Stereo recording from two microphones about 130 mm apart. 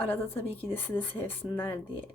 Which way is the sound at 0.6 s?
15° left (ahead or behind).